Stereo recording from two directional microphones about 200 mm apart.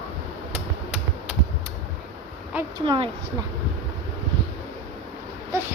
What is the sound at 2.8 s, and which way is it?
Speech, 25° right (ahead or behind).